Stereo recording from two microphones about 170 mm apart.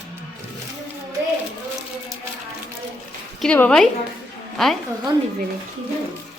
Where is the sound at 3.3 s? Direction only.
10° left (ahead or behind).